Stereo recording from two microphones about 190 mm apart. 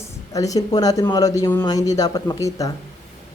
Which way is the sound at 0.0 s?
20° left (ahead or behind).